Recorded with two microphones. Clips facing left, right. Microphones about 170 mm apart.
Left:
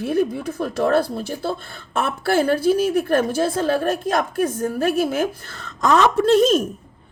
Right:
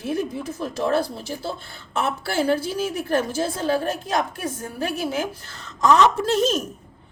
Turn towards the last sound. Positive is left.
turn(degrees=60)  # may be behind; listen again after turning